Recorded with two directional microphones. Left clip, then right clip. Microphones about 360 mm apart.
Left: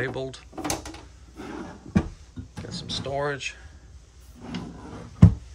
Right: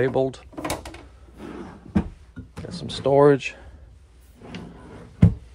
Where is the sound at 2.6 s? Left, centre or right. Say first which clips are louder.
Right 9 dB; centre.